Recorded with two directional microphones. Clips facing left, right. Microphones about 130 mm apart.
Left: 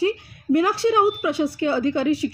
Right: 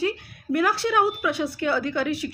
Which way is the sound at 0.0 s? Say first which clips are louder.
Left 4 dB; 25° left (ahead or behind).